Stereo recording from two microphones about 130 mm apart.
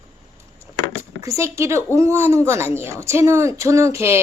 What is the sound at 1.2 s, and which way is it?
A woman's voice, 25° right (ahead or behind).